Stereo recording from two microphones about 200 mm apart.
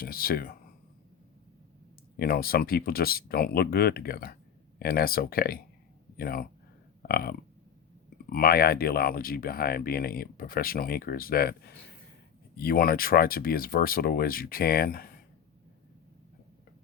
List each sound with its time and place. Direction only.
0.0 s speech: 45° left (ahead or behind)
2.1 s speech: 50° left (ahead or behind)